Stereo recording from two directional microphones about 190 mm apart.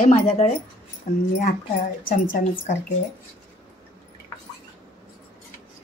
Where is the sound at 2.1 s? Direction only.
45° left (ahead or behind).